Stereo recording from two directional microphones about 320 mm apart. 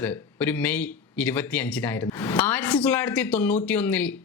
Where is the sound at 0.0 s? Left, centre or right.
Centre.